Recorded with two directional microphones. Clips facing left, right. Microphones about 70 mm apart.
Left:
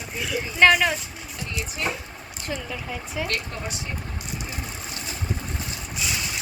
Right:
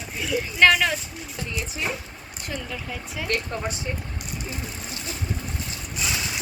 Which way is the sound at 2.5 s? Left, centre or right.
Centre.